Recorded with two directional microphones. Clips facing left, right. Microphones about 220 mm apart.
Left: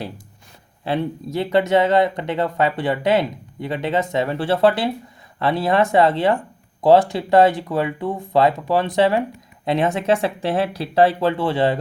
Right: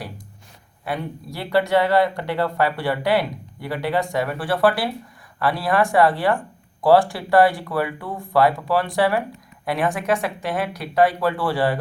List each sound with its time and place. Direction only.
0.9 s speech: 25° left (ahead or behind)